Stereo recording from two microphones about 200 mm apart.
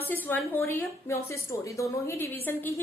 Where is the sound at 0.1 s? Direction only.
10° left (ahead or behind).